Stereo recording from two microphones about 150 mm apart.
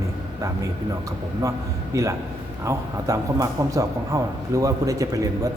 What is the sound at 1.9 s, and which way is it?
A man's voice, 20° right (ahead or behind).